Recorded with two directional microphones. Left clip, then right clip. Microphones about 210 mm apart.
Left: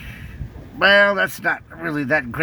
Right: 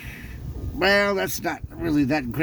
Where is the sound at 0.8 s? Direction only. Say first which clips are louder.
Left 6 dB; 15° left (ahead or behind).